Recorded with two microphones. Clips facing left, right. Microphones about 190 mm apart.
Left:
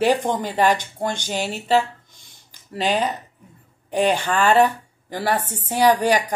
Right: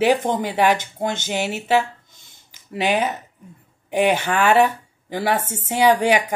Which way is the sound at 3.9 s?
20° right (ahead or behind).